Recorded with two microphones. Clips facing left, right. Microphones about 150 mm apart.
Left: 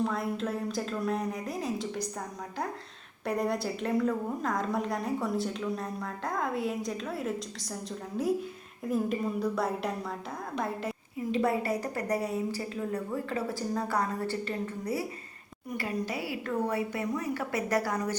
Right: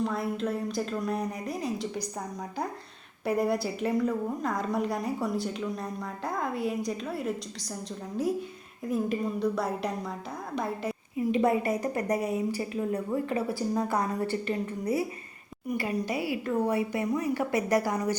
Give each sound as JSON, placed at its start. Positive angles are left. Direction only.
{"t": 0.0, "sound": "a woman's voice", "side_deg": 0}
{"t": 3.2, "sound": "a woman's voice", "side_deg": -5}
{"t": 11.3, "sound": "a woman's voice", "side_deg": -20}